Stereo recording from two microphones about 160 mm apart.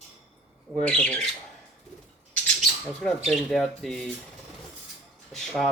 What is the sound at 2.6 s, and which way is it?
Speech, centre (ahead or behind).